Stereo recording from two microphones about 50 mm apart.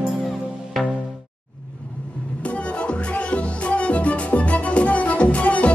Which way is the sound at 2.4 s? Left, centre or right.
Left.